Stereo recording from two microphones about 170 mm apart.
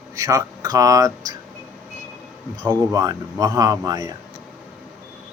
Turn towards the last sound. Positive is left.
turn(degrees=-20)  # may be behind; listen again after turning